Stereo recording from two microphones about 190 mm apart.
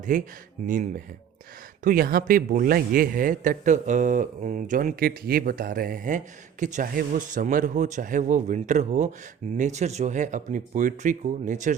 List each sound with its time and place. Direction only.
0.1 s a man's voice: 45° right (ahead or behind)